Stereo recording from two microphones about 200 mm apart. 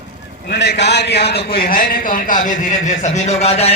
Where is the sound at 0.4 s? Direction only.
55° left (ahead or behind).